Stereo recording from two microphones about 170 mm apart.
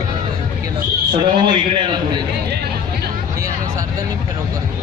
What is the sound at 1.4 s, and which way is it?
Speech, 30° right (ahead or behind).